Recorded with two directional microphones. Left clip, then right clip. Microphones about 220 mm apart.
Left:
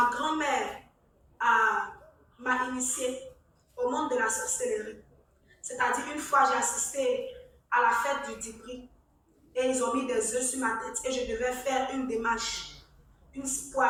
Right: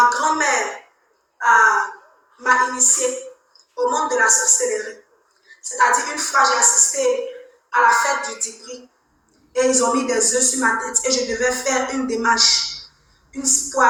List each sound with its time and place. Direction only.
0.0 s a sound: 40° right (ahead or behind)
1.5 s gasp: 35° right (ahead or behind)
2.4 s a sound: 40° right (ahead or behind)
5.8 s music: 40° right (ahead or behind)
7.7 s a woman's voice: 40° right (ahead or behind)
9.6 s a woman's voice: 35° right (ahead or behind)